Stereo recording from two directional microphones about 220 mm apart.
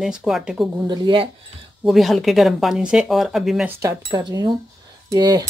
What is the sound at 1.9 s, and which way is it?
Speech, centre (ahead or behind).